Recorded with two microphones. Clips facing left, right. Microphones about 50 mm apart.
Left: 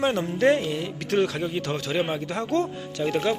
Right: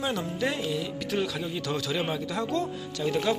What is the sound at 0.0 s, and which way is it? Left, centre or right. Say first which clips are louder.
Speech: left 7 dB; left.